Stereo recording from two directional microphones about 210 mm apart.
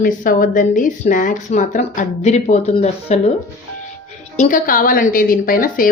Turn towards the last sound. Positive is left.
turn(degrees=40)  # may be behind; listen again after turning